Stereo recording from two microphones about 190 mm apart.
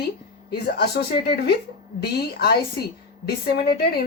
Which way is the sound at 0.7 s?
55° left (ahead or behind).